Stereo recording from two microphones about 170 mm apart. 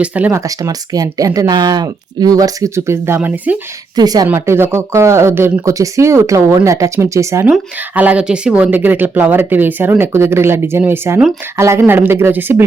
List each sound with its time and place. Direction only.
0.0 s speech: 10° right (ahead or behind)
3.9 s speech: 20° right (ahead or behind)